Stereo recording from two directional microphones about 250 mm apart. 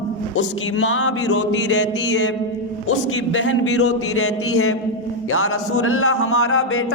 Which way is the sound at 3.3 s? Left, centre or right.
Left.